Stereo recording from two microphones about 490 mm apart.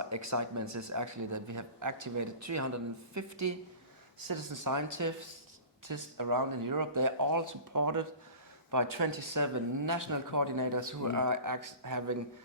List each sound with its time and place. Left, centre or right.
0.0 s speech: right